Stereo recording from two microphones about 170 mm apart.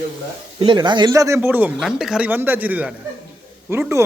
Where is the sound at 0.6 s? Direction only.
25° right (ahead or behind).